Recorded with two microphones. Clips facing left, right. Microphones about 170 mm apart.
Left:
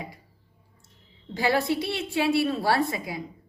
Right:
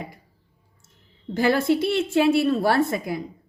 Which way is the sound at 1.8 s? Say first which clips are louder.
Right 7 dB; 50° right (ahead or behind).